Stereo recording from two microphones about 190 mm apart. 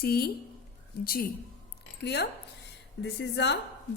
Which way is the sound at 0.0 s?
55° left (ahead or behind).